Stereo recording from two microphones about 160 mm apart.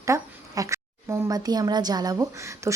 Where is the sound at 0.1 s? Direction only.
20° right (ahead or behind).